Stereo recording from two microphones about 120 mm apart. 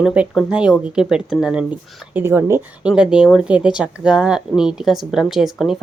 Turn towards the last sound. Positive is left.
turn(degrees=-5)  # may be behind; listen again after turning